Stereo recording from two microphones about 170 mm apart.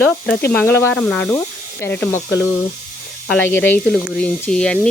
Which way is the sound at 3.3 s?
10° left (ahead or behind).